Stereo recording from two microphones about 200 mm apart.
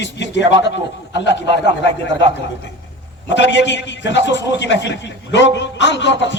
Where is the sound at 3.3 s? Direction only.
60° left (ahead or behind).